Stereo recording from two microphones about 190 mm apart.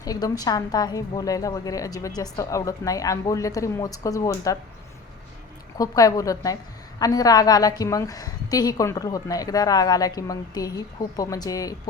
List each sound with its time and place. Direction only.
0.0 s a woman's voice: 20° left (ahead or behind)
5.7 s a woman's voice: 20° left (ahead or behind)